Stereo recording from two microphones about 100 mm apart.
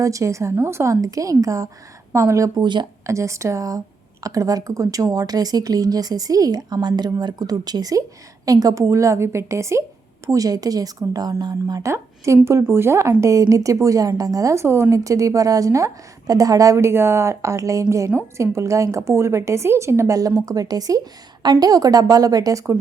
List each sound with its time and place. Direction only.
0.0 s a woman's voice: 30° right (ahead or behind)
2.6 s speech: 50° right (ahead or behind)
3.1 s a woman's voice: 30° right (ahead or behind)
11.9 s a woman's voice: 30° right (ahead or behind)